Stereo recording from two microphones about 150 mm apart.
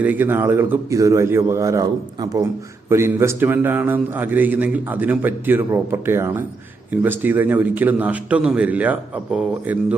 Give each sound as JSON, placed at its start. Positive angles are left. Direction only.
{"t": 0.0, "sound": "a man's voice", "side_deg": -10}